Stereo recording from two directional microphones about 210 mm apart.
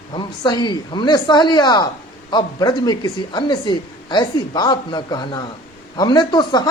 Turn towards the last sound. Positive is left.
turn(degrees=20)  # may be behind; listen again after turning